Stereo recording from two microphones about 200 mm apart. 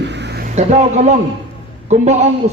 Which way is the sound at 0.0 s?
60° right (ahead or behind).